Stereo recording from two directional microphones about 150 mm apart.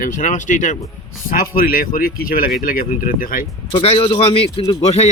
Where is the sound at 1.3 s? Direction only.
70° left (ahead or behind).